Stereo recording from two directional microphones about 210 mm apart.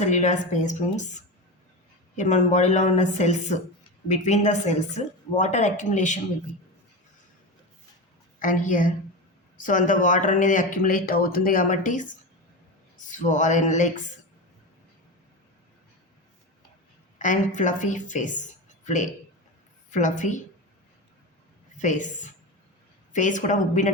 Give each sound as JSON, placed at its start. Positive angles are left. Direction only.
{"t": 0.0, "sound": "speech", "side_deg": 35}
{"t": 8.4, "sound": "speech", "side_deg": 40}
{"t": 17.2, "sound": "speech", "side_deg": 35}
{"t": 19.9, "sound": "speech", "side_deg": 35}
{"t": 21.8, "sound": "speech", "side_deg": 35}